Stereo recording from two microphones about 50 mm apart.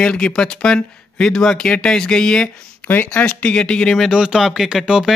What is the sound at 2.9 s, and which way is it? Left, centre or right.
Speech, left.